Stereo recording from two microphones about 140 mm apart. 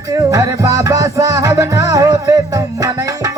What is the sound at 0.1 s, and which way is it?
Music, 25° right (ahead or behind).